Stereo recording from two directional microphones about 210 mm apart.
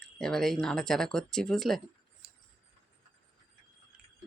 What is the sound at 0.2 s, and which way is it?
Speech, centre (ahead or behind).